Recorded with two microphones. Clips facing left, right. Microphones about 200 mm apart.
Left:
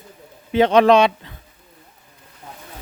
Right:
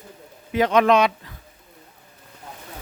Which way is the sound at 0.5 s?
30° left (ahead or behind).